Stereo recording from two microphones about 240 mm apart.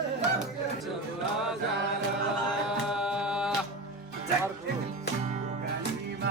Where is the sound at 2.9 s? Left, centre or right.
Centre.